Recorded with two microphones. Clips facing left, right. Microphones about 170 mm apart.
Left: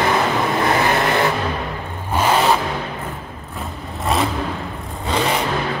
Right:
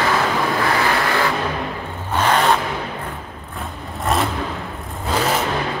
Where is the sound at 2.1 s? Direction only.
10° left (ahead or behind).